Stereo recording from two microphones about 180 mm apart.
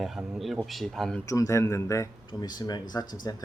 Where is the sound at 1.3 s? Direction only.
15° left (ahead or behind).